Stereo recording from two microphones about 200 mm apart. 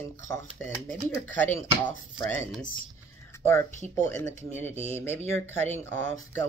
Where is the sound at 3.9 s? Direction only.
10° left (ahead or behind).